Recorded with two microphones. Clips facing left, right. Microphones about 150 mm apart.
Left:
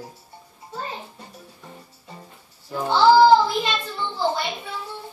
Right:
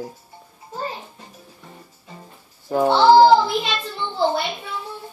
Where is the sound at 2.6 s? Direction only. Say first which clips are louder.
Right 8 dB; 60° right (ahead or behind).